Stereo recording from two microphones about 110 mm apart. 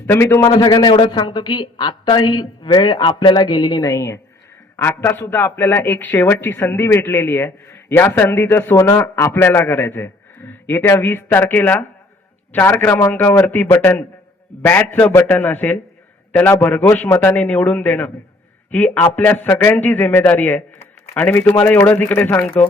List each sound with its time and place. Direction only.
0.1 s speech: 20° left (ahead or behind)
0.4 s a man's voice: 40° left (ahead or behind); by 22.4 s 20° left (ahead or behind)